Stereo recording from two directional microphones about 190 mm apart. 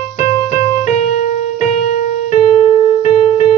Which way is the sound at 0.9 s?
35° left (ahead or behind).